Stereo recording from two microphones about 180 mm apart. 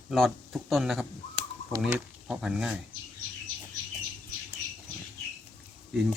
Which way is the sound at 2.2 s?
5° right (ahead or behind).